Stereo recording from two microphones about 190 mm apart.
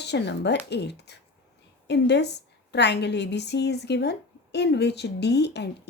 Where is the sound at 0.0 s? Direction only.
65° left (ahead or behind).